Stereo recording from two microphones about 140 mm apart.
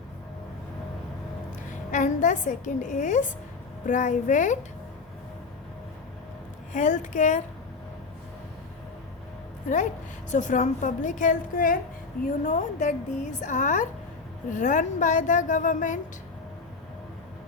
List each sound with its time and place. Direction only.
1.9 s a woman's voice: 60° left (ahead or behind)
6.7 s a woman's voice: 60° left (ahead or behind)
10.3 s a woman's voice: 65° left (ahead or behind)
12.4 s a woman's voice: 60° left (ahead or behind)